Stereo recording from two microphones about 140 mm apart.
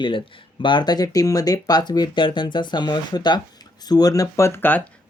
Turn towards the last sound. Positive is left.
turn(degrees=15)  # may be behind; listen again after turning